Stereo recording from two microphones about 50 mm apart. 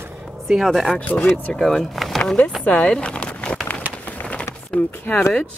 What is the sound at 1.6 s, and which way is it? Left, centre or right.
Speech, centre.